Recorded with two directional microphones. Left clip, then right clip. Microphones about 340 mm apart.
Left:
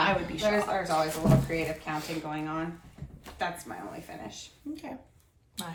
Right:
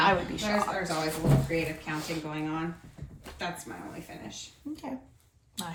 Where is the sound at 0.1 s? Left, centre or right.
Centre.